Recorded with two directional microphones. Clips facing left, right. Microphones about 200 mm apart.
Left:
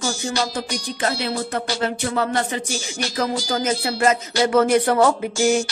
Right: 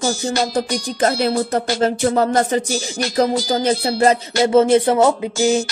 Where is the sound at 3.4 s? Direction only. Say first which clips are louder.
Right 5 dB; 25° right (ahead or behind).